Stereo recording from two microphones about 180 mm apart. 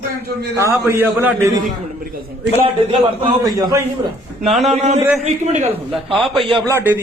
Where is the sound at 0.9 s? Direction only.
10° right (ahead or behind).